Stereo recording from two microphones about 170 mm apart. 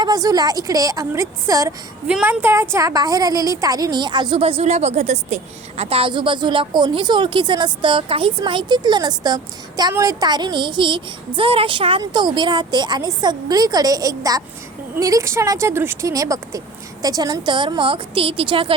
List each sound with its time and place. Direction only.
0.0 s a woman's voice: 20° right (ahead or behind)
2.0 s a woman's voice: 5° right (ahead or behind); by 18.7 s 30° right (ahead or behind)